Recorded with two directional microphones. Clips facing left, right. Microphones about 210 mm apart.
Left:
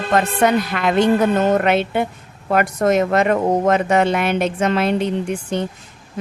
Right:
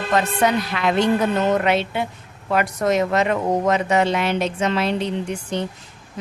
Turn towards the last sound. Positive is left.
turn(degrees=50)  # may be behind; listen again after turning